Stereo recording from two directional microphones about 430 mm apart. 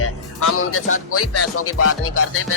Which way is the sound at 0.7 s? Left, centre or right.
Left.